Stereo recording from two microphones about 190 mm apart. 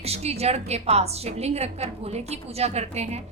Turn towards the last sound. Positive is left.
turn(degrees=-35)  # may be behind; listen again after turning